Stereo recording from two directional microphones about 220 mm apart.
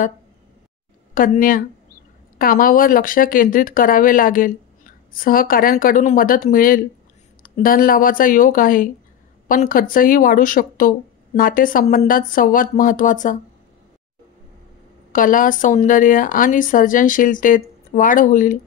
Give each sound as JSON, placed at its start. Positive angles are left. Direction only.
{"t": 1.1, "sound": "speech", "side_deg": 40}
{"t": 15.1, "sound": "speech", "side_deg": 40}